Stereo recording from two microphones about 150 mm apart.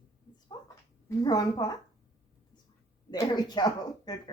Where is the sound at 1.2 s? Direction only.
25° left (ahead or behind).